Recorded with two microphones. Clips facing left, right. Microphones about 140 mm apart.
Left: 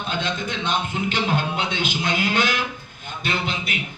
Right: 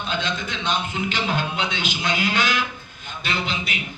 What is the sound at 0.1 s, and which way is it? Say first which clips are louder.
A man's voice: left 1 dB; 50° left (ahead or behind).